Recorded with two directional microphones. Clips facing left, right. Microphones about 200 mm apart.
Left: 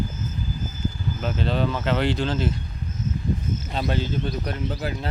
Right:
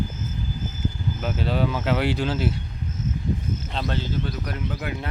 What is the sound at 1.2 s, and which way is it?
Speech, 10° right (ahead or behind).